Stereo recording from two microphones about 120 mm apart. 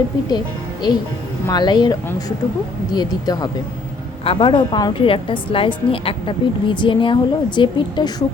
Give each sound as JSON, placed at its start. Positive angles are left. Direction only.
{"t": 0.3, "sound": "speech", "side_deg": 35}
{"t": 4.2, "sound": "a woman's voice", "side_deg": 45}